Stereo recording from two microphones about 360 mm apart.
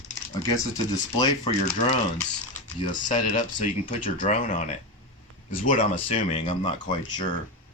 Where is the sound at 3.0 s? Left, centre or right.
Left.